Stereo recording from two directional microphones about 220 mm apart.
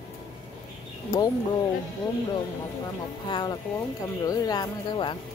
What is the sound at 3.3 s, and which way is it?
Speech, 20° left (ahead or behind).